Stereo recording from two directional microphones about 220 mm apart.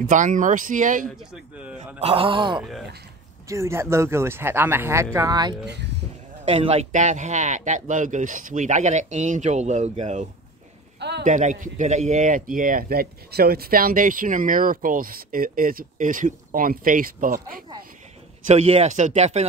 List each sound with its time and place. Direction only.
0.0 s speech: 35° right (ahead or behind)
1.0 s speech: centre (ahead or behind)
2.0 s speech: 25° right (ahead or behind)
5.7 s speech: 50° right (ahead or behind)
6.4 s speech: 25° right (ahead or behind)
11.0 s a sound: 50° right (ahead or behind)
11.2 s speech: 35° right (ahead or behind)
18.5 s speech: 30° right (ahead or behind)